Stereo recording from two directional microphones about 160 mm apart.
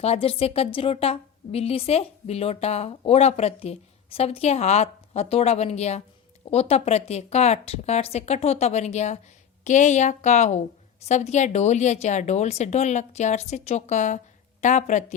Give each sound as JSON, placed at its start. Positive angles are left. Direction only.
{"t": 0.0, "sound": "a woman's voice", "side_deg": 40}